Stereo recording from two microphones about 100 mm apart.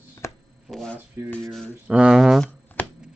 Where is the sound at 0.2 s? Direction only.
30° left (ahead or behind).